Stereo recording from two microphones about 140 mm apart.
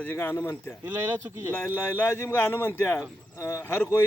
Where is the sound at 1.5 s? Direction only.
20° left (ahead or behind).